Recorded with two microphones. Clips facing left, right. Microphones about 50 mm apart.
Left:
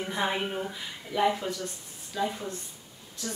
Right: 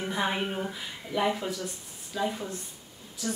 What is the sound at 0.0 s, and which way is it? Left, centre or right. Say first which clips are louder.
A woman's voice: even; centre.